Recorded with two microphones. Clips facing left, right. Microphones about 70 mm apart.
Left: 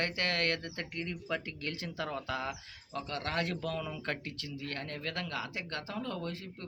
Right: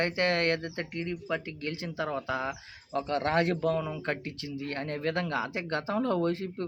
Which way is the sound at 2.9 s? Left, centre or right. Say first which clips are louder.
Right 8 dB; right.